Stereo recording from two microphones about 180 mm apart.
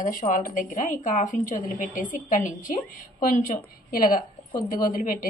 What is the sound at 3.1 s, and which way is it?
A woman's voice, 45° left (ahead or behind).